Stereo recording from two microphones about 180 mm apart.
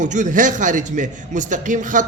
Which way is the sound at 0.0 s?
45° right (ahead or behind).